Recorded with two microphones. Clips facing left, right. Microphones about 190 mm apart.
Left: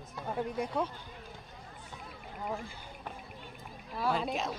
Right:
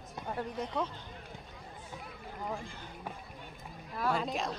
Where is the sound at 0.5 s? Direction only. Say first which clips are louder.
Left 1 dB; 10° left (ahead or behind).